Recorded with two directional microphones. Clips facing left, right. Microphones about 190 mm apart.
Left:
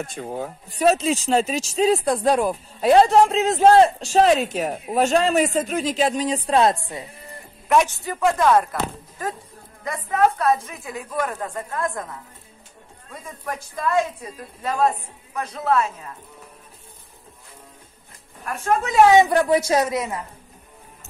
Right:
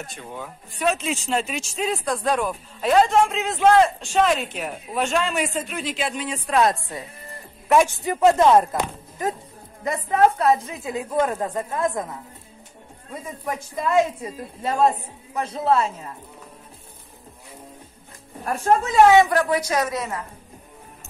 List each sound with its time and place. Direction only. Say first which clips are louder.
0.0 s speech: left 6 dB; 45° left (ahead or behind); by 7.1 s 25° left (ahead or behind)
7.6 s a woman's voice: right 1 dB; centre (ahead or behind)
7.9 s a woman's voice: right 4 dB; 20° right (ahead or behind)
13.7 s a woman's voice: right 2 dB; 20° right (ahead or behind)
18.4 s speech: right 3 dB; 35° right (ahead or behind)
19.1 s a woman's voice: left 1 dB; 25° left (ahead or behind)